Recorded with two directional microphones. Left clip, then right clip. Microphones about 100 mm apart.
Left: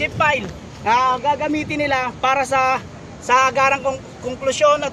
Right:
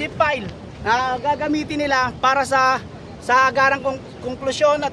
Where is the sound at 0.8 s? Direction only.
30° right (ahead or behind).